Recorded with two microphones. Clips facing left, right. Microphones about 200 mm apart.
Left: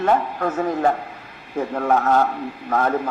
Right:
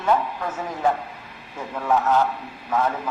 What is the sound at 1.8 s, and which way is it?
A man's voice, 55° left (ahead or behind).